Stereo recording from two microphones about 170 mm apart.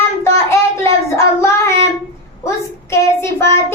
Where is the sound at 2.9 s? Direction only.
15° left (ahead or behind).